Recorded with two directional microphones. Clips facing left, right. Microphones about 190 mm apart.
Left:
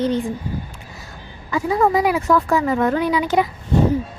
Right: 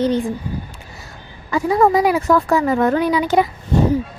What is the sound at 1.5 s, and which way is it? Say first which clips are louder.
Speech: right 3 dB; 40° right (ahead or behind).